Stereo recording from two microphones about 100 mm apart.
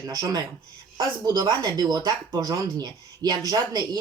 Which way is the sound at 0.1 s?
35° right (ahead or behind).